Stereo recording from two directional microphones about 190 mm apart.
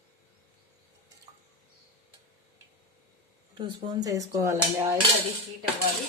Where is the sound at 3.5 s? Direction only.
25° right (ahead or behind).